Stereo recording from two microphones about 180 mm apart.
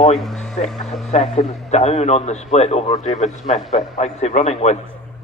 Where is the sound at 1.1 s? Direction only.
40° left (ahead or behind).